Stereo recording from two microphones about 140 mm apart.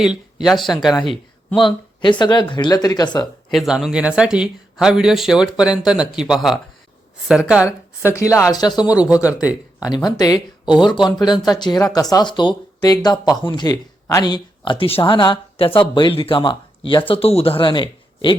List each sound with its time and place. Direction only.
0.0 s speech: centre (ahead or behind)
1.5 s speech: 35° left (ahead or behind)
3.5 s speech: centre (ahead or behind)
8.1 s speech: 20° left (ahead or behind)
9.0 s speech: 10° right (ahead or behind)
9.8 s speech: 30° left (ahead or behind)